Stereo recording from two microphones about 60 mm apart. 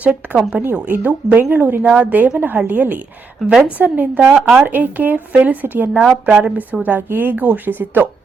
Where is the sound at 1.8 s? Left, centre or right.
Right.